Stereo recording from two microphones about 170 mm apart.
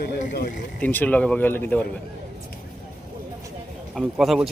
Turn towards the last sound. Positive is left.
turn(degrees=0)  # may be behind; listen again after turning